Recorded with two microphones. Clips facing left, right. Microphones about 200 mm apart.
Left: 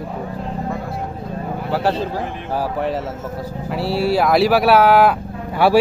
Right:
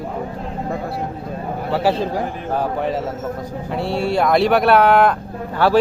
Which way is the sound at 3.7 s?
5° left (ahead or behind).